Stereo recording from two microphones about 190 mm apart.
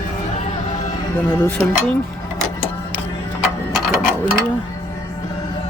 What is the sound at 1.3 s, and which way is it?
Speech, 10° left (ahead or behind).